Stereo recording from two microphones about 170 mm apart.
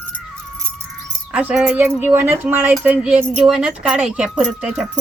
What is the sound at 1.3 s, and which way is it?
Speech, 10° right (ahead or behind).